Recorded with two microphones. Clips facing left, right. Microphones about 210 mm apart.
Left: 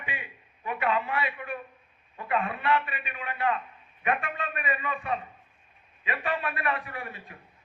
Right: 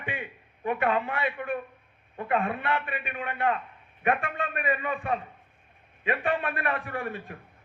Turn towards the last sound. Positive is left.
turn(degrees=-50)  # may be behind; listen again after turning